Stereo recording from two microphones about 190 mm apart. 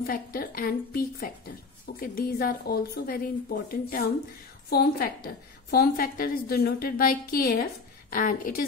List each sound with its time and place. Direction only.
0.0 s a woman's voice: 50° left (ahead or behind)